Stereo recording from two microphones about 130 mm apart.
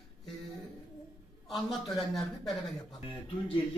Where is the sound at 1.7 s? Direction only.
Centre (ahead or behind).